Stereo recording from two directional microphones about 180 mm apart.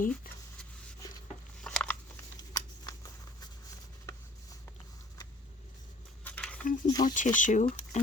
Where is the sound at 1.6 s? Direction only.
5° left (ahead or behind).